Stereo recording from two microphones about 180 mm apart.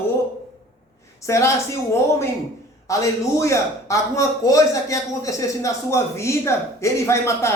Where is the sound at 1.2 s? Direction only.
15° left (ahead or behind).